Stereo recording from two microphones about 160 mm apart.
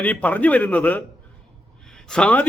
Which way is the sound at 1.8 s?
5° left (ahead or behind).